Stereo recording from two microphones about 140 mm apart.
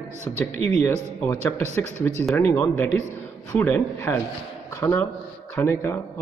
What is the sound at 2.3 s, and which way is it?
Speech, 15° left (ahead or behind).